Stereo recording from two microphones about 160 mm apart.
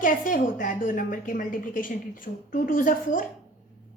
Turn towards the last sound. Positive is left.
turn(degrees=60)  # may be behind; listen again after turning